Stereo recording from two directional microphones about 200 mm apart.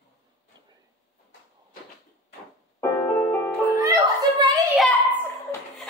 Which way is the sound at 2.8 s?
15° left (ahead or behind).